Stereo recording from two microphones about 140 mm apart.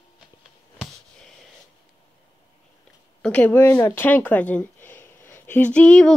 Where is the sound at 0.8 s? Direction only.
5° left (ahead or behind).